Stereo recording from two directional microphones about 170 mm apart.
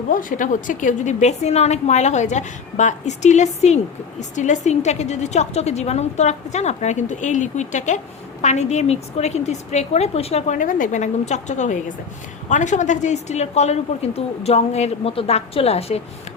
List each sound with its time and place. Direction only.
0.1 s a woman's voice: 50° left (ahead or behind)